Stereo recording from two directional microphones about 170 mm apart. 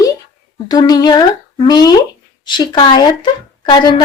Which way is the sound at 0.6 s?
25° left (ahead or behind).